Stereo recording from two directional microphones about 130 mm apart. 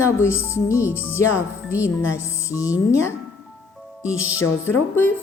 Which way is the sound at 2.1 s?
20° left (ahead or behind).